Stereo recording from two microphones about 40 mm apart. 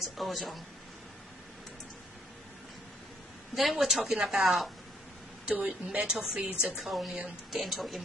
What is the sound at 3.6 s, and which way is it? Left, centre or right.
Speech, centre.